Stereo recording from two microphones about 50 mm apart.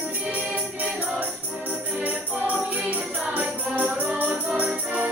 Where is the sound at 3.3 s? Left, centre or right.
Right.